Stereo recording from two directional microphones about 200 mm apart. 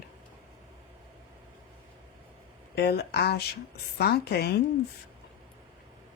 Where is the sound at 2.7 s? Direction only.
55° left (ahead or behind).